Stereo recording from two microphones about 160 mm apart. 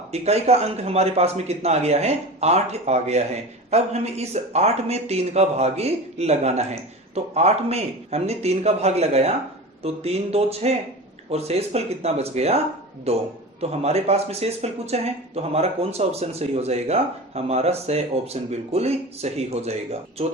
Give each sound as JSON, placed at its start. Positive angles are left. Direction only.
{"t": 0.1, "sound": "speech", "side_deg": -40}